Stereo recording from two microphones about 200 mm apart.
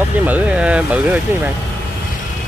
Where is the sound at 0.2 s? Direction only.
10° right (ahead or behind).